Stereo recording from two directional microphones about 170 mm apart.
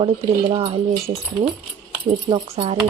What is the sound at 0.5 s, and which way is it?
Speech, 35° right (ahead or behind).